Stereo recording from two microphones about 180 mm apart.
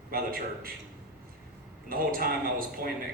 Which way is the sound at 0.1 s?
55° right (ahead or behind).